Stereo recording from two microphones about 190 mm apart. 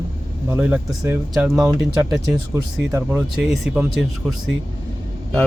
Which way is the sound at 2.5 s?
15° right (ahead or behind).